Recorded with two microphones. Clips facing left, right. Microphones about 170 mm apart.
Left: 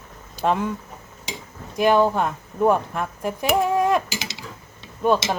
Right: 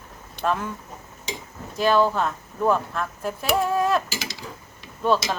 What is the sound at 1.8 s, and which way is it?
Speech, 15° left (ahead or behind).